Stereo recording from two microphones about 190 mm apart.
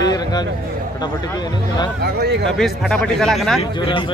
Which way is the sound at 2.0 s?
60° right (ahead or behind).